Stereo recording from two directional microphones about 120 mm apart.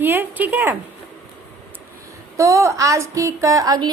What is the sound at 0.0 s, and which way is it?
Speech, 15° right (ahead or behind).